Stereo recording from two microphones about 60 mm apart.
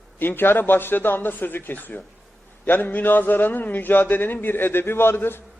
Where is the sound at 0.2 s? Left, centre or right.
Left.